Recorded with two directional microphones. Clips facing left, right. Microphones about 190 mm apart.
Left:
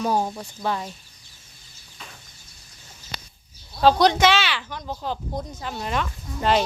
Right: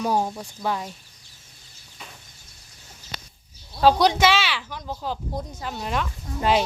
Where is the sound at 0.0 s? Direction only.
5° right (ahead or behind).